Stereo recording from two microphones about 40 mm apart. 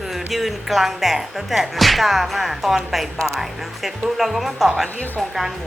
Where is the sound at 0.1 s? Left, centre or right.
Centre.